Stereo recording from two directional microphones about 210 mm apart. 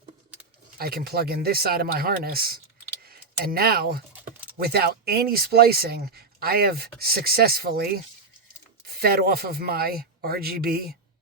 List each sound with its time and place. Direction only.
0.8 s speech: 45° right (ahead or behind)